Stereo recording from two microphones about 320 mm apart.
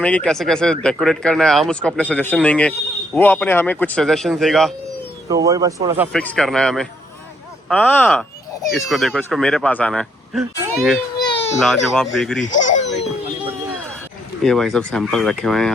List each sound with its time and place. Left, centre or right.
0.0 s speech: centre
5.3 s speech: centre
6.1 s speech: centre
11.2 s baby cry: centre
11.6 s speech: centre
12.5 s speech: left
14.4 s speech: centre